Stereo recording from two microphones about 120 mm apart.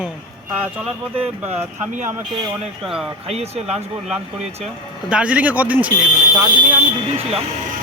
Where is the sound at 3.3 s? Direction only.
60° right (ahead or behind).